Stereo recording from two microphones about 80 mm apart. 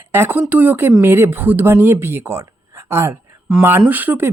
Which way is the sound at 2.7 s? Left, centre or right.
Right.